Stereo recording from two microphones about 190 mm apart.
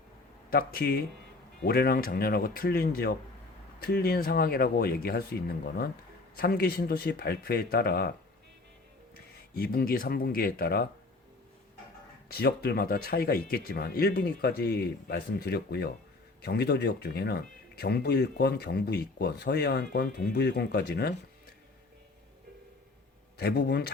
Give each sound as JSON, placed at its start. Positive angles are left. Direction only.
{"t": 0.5, "sound": "speech", "side_deg": 50}
{"t": 9.1, "sound": "speech", "side_deg": 55}
{"t": 12.3, "sound": "speech", "side_deg": 55}
{"t": 23.4, "sound": "speech", "side_deg": 60}